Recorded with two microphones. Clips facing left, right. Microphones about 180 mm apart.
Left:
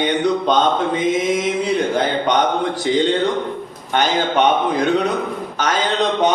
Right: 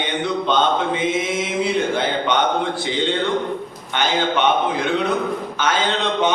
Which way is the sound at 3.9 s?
40° left (ahead or behind).